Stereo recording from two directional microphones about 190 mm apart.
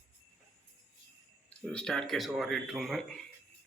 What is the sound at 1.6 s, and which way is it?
Speech, 5° left (ahead or behind).